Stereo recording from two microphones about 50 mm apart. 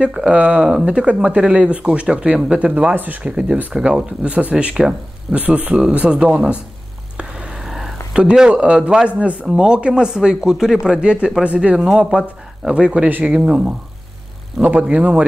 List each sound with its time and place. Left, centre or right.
0.3 s speech: right
2.6 s speech: right
3.3 s speech: centre
4.2 s speech: right
7.2 s vehicle: centre
7.6 s a sound: centre
8.2 s speech: centre